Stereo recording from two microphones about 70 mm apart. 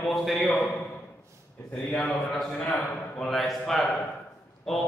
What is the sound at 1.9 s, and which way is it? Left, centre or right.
A man's voice, centre.